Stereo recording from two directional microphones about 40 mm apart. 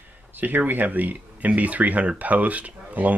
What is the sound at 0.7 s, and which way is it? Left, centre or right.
Speech, right.